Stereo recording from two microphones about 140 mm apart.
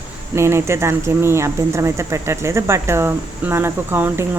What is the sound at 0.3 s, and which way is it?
Speech, 20° right (ahead or behind).